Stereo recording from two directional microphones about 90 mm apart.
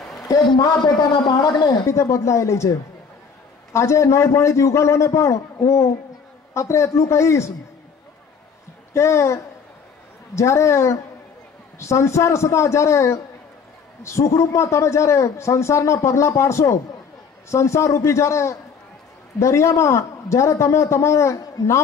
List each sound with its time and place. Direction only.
0.3 s a man's voice: 40° left (ahead or behind)
0.8 s speech: 55° left (ahead or behind)
1.9 s a man's voice: 35° left (ahead or behind)
3.7 s a man's voice: 35° left (ahead or behind)
8.9 s a man's voice: 35° left (ahead or behind)